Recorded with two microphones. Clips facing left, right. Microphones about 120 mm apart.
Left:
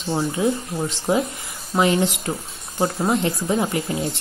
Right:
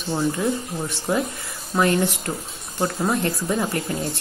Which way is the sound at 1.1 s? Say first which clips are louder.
Left 2 dB; 20° left (ahead or behind).